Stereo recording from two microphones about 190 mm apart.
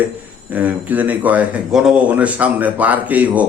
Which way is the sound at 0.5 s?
10° right (ahead or behind).